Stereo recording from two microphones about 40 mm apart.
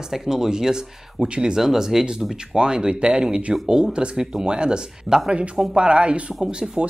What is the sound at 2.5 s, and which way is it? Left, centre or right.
Speech, right.